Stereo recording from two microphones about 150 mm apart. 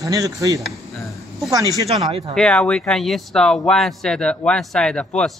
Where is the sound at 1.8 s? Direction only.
45° right (ahead or behind).